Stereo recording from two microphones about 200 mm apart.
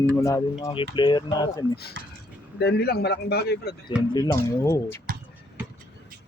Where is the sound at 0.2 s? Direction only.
15° left (ahead or behind).